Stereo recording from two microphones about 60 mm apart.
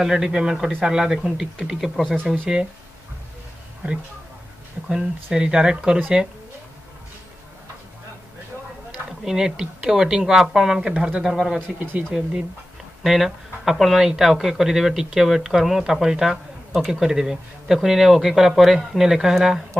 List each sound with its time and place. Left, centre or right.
0.0 s a man's voice: centre
4.8 s a man's voice: centre
9.2 s a man's voice: centre
11.2 s speech: centre
11.8 s speech: right
13.0 s a man's voice: centre